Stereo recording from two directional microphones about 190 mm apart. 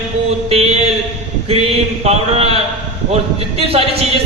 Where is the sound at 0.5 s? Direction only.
30° right (ahead or behind).